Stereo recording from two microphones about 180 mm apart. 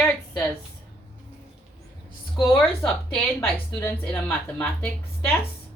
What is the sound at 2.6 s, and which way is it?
A woman's voice, 5° left (ahead or behind).